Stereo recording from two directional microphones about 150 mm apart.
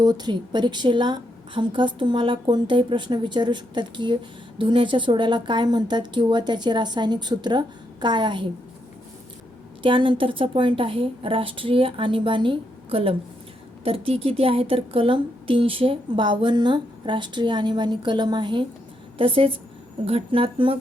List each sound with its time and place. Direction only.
0.0 s a woman's voice: 25° right (ahead or behind)
9.8 s a woman's voice: 35° right (ahead or behind)